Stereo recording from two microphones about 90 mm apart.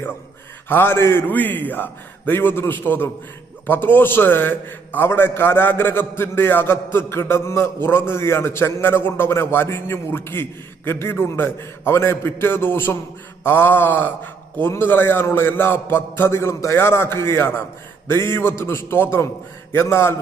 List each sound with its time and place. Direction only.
0.7 s a man's voice: 25° left (ahead or behind)